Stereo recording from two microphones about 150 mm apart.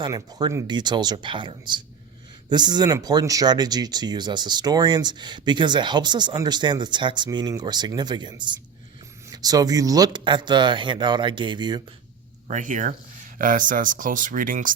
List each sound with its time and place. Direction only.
0.0 s speech: 25° right (ahead or behind)
12.5 s speech: 60° right (ahead or behind)